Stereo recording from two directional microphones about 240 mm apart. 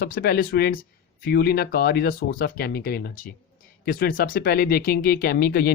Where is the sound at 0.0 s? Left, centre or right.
Left.